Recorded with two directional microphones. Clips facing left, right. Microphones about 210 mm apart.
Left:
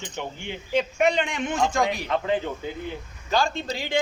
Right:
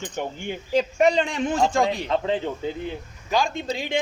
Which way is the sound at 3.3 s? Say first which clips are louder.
Right 1 dB; 20° right (ahead or behind).